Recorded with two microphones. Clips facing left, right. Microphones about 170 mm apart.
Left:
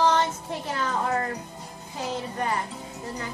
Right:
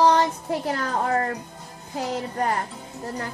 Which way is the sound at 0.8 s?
50° right (ahead or behind).